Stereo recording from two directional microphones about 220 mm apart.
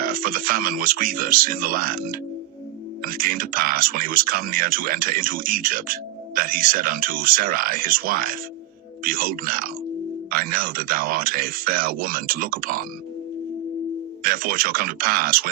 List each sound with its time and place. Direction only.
0.0 s speech: 40° right (ahead or behind)
14.3 s speech: 40° right (ahead or behind)